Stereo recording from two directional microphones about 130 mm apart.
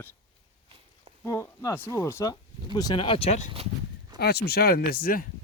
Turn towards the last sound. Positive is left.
turn(degrees=90)